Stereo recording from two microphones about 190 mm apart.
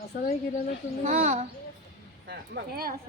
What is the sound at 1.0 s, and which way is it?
Speech, 35° right (ahead or behind).